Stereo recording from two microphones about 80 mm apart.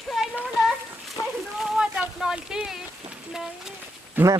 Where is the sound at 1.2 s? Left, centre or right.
Left.